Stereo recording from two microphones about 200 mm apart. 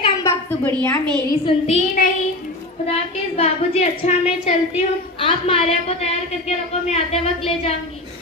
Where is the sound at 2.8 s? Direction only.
30° left (ahead or behind).